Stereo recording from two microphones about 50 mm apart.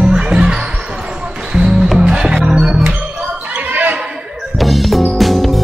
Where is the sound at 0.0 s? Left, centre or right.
Centre.